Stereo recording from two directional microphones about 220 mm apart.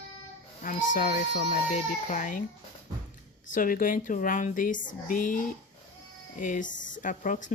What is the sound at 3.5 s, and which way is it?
Speech, 40° left (ahead or behind).